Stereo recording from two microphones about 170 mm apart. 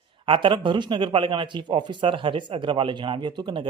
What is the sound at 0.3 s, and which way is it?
Speech, 30° right (ahead or behind).